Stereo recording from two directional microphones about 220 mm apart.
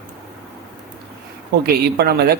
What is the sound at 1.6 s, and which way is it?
Speech, 45° right (ahead or behind).